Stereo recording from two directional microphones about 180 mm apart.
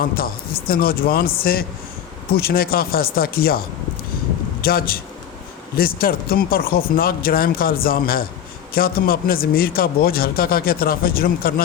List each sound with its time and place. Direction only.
0.7 s a man's voice: 55° left (ahead or behind)
4.6 s a man's voice: 55° left (ahead or behind)